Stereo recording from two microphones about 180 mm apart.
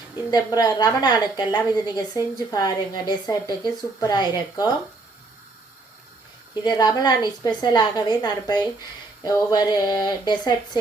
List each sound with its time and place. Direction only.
0.3 s a woman's voice: 20° left (ahead or behind)
6.5 s a woman's voice: 25° left (ahead or behind)